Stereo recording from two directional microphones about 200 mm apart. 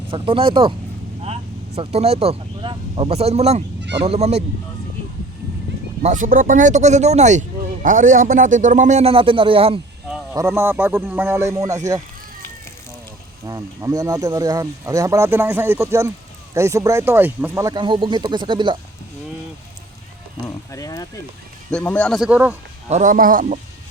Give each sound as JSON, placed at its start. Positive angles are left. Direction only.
{"t": 0.1, "sound": "speech", "side_deg": -25}
{"t": 3.8, "sound": "a sound", "side_deg": -60}
{"t": 4.0, "sound": "speech", "side_deg": -30}
{"t": 6.0, "sound": "speech", "side_deg": -40}
{"t": 10.3, "sound": "speech", "side_deg": -10}
{"t": 13.4, "sound": "speech", "side_deg": -15}
{"t": 20.5, "sound": "speech", "side_deg": 15}
{"t": 21.7, "sound": "speech", "side_deg": 5}
{"t": 22.9, "sound": "speech", "side_deg": -40}